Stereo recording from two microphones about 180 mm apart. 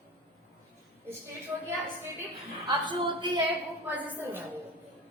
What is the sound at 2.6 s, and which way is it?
Speech, 25° right (ahead or behind).